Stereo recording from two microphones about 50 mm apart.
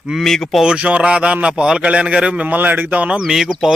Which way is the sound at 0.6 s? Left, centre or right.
Right.